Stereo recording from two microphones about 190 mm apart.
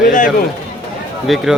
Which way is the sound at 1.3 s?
Centre (ahead or behind).